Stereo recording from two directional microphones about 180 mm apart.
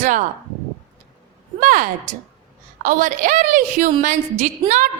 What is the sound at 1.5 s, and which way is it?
A woman's voice, 50° right (ahead or behind).